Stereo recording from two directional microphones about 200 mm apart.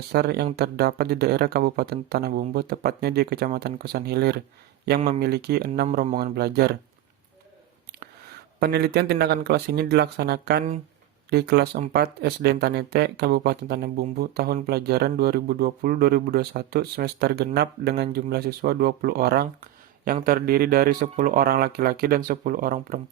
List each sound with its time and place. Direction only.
0.1 s speech: 55° right (ahead or behind)
8.6 s speech: 55° right (ahead or behind)